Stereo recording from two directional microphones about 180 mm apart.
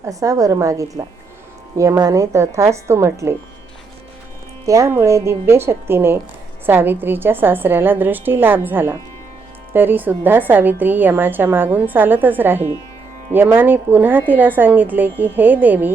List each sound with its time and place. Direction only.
0.0 s a woman's voice: 20° right (ahead or behind)
4.6 s a woman's voice: 15° right (ahead or behind)